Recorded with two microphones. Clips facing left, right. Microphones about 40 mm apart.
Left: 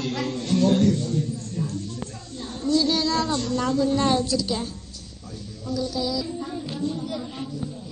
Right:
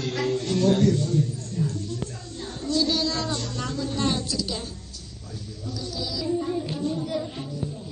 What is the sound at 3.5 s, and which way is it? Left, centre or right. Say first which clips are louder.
A woman's voice: left 7 dB; left.